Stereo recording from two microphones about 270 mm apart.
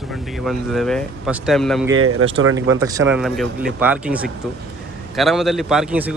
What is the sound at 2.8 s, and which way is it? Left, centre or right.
A man's voice, centre.